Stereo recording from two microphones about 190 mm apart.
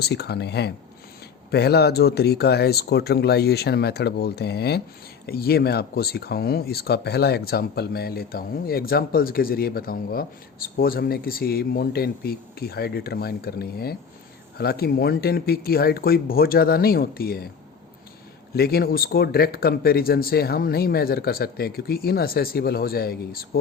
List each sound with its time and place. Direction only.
0.0 s speech: 60° left (ahead or behind)
18.5 s speech: 55° left (ahead or behind)